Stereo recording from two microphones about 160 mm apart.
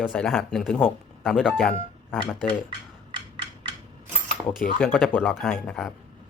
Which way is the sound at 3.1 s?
30° right (ahead or behind).